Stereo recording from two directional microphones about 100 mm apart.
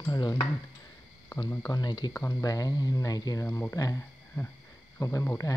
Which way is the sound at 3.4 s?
25° left (ahead or behind).